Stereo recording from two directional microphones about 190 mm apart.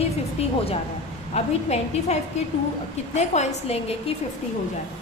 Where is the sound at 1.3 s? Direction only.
35° left (ahead or behind).